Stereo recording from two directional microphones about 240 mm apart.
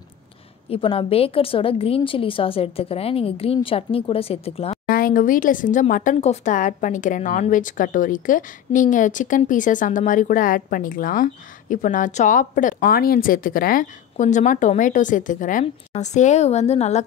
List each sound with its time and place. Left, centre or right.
0.7 s a woman's voice: left